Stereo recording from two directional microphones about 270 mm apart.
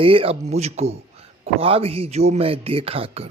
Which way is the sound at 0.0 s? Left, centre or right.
Centre.